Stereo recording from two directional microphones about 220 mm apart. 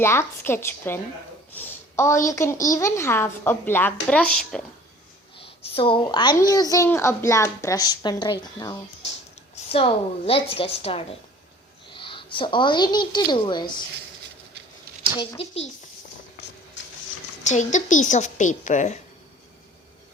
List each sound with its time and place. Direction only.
0.0 s a woman's voice: 10° left (ahead or behind)
5.4 s a woman's voice: 25° left (ahead or behind)
15.2 s a woman's voice: 25° left (ahead or behind)
17.4 s speech: 35° left (ahead or behind)